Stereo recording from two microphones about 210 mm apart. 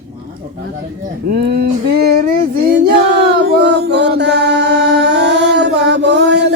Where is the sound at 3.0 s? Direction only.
55° right (ahead or behind).